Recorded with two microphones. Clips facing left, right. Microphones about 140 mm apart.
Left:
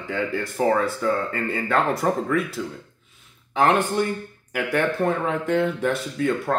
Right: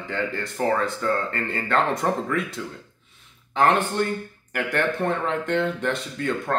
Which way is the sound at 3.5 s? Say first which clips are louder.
Left 1 dB; 10° left (ahead or behind).